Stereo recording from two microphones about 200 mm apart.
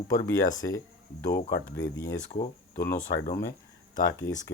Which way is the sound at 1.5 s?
65° left (ahead or behind).